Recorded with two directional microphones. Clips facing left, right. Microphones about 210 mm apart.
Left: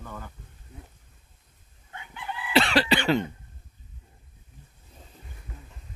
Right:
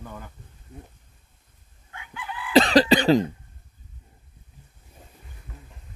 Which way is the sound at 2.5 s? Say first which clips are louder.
Right 6 dB; 40° right (ahead or behind).